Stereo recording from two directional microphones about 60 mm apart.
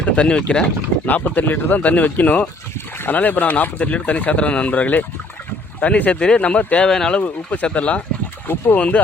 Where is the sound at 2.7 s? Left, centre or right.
Left.